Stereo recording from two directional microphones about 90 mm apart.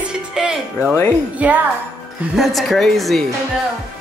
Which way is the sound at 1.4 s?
15° right (ahead or behind).